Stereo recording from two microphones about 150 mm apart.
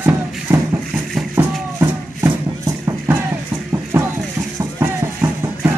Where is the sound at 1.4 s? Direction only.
10° right (ahead or behind).